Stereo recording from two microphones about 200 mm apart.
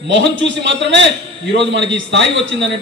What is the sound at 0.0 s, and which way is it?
A man's voice, 60° right (ahead or behind).